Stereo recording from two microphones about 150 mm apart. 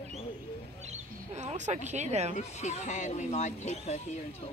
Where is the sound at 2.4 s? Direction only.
50° left (ahead or behind).